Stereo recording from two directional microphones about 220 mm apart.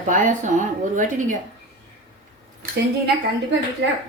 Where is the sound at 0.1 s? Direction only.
35° right (ahead or behind).